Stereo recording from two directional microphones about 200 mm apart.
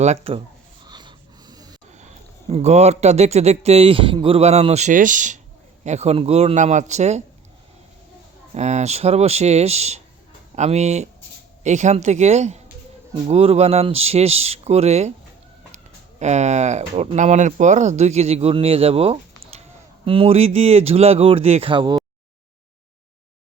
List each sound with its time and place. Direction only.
0.0 s speech: 30° right (ahead or behind)
0.9 s a sound: 20° right (ahead or behind)
2.5 s speech: 35° right (ahead or behind)
8.5 s speech: 35° right (ahead or behind)